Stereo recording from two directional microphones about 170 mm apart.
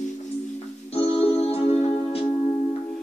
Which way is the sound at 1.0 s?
35° left (ahead or behind).